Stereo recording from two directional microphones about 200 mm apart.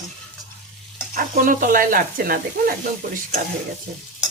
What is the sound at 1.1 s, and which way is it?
Speech, 45° right (ahead or behind).